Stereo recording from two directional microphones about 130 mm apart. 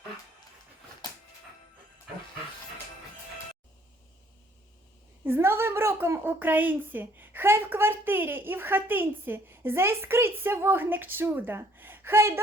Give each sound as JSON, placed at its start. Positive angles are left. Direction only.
{"t": 5.2, "sound": "a woman's voice", "side_deg": -20}